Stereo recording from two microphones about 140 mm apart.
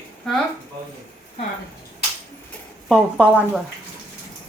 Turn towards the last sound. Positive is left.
turn(degrees=-5)  # may be behind; listen again after turning